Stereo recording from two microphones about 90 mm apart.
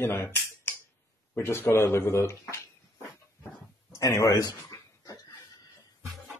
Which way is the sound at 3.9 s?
35° left (ahead or behind).